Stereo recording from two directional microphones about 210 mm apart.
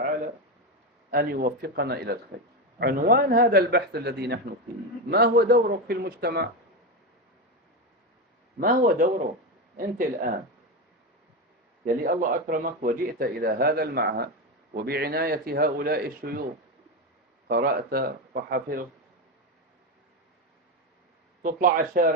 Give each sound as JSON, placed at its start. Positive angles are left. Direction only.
{"t": 1.1, "sound": "speech", "side_deg": -45}
{"t": 8.6, "sound": "speech", "side_deg": -40}
{"t": 12.0, "sound": "speech", "side_deg": -40}
{"t": 17.5, "sound": "speech", "side_deg": -45}
{"t": 21.4, "sound": "speech", "side_deg": -40}